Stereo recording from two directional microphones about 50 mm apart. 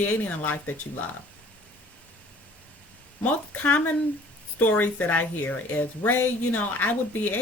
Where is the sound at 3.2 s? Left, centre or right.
Left.